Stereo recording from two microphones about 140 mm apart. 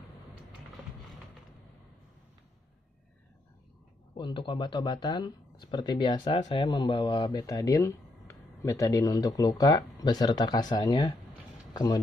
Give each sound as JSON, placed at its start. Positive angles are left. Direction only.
{"t": 4.2, "sound": "speech", "side_deg": 35}